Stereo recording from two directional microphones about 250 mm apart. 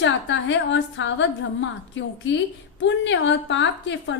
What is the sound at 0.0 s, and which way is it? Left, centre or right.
A woman's voice, left.